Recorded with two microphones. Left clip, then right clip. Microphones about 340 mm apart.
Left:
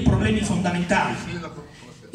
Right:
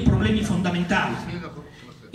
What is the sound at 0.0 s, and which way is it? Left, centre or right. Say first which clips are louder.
Music: left 1 dB; centre.